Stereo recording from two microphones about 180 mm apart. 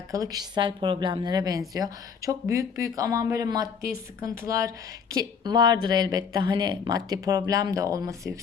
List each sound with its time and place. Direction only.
0.1 s a woman's voice: 20° right (ahead or behind)